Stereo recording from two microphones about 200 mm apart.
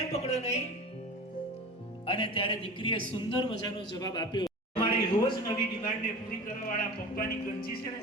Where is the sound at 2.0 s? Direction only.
25° left (ahead or behind).